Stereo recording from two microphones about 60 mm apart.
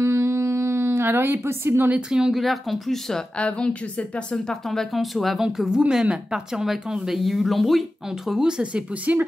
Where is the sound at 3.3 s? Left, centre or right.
Centre.